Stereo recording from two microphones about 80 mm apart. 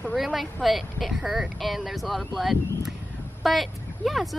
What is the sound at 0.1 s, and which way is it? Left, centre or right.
A woman's voice, centre.